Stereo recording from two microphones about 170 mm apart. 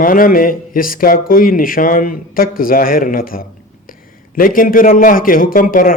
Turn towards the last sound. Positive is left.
turn(degrees=55)  # may be behind; listen again after turning